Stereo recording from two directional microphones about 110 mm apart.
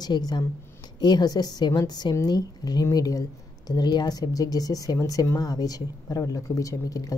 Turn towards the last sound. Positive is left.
turn(degrees=30)  # may be behind; listen again after turning